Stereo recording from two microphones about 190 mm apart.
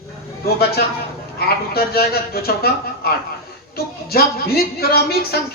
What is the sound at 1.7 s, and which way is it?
Speech, 55° left (ahead or behind).